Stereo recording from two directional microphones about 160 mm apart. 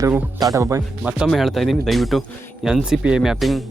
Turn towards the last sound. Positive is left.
turn(degrees=0)  # may be behind; listen again after turning